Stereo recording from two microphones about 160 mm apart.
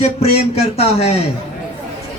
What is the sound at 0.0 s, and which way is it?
Speech, 40° left (ahead or behind).